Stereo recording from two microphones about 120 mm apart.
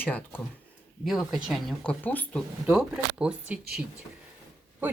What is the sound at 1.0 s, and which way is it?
Speech, centre (ahead or behind).